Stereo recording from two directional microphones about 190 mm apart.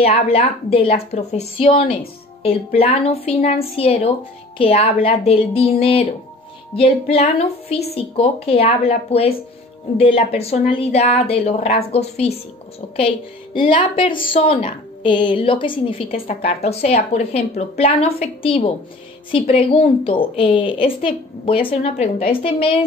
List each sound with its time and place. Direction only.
0.0 s a woman's voice: 30° left (ahead or behind)